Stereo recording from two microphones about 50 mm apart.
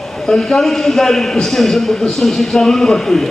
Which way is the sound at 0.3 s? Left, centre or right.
Centre.